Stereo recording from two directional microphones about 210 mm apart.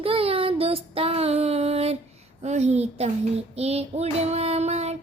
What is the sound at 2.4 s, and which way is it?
Speech, 30° right (ahead or behind).